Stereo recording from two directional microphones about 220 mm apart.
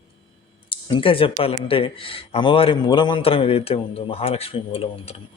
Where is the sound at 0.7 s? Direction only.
20° left (ahead or behind).